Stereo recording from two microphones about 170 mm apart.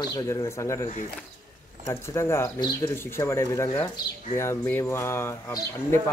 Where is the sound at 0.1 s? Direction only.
20° left (ahead or behind).